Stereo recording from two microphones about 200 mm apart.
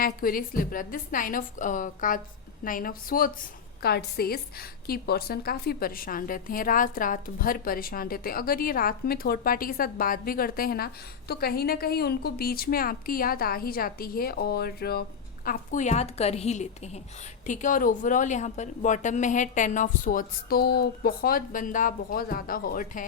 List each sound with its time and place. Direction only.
0.0 s a woman's voice: 45° left (ahead or behind)